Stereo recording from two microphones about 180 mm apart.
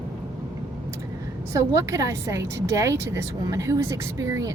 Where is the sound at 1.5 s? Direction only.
15° right (ahead or behind).